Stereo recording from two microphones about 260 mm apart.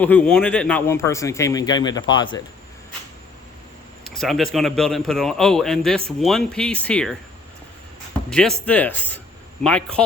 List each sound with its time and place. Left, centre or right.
0.0 s speech: centre
4.0 s a sound: centre
4.5 s a man's voice: centre
8.3 s a man's voice: centre